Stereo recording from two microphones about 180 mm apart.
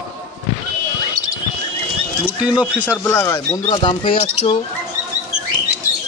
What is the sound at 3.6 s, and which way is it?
Speech, 30° left (ahead or behind).